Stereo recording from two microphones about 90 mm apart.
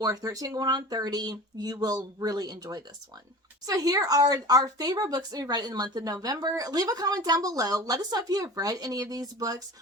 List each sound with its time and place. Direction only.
0.0 s a woman's voice: 45° right (ahead or behind)